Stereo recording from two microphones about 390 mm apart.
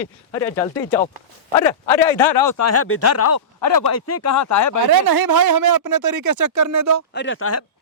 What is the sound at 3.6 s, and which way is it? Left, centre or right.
Speech, left.